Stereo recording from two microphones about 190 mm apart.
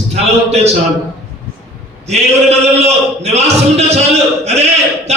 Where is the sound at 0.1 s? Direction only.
35° right (ahead or behind).